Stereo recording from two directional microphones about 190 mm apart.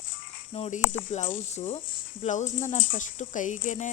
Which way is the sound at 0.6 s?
40° left (ahead or behind).